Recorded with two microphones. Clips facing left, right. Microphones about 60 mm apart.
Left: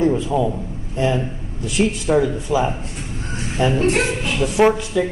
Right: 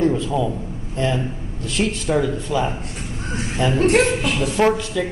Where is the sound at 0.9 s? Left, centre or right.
Centre.